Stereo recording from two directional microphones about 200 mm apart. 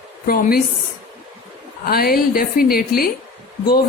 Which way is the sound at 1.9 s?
50° left (ahead or behind).